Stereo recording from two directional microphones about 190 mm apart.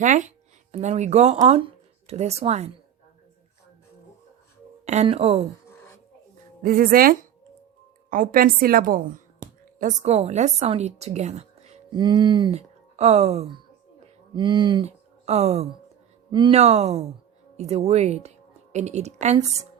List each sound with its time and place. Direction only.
0.0 s music: 40° right (ahead or behind)
0.7 s speech: 35° right (ahead or behind)
4.9 s speech: 35° right (ahead or behind)
6.6 s a woman's voice: 50° right (ahead or behind)
11.9 s a woman's voice: 25° right (ahead or behind)